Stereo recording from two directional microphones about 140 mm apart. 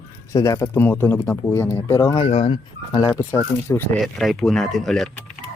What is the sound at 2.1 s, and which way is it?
Speech, 40° left (ahead or behind).